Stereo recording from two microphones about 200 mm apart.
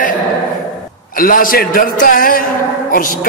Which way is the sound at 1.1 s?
45° left (ahead or behind).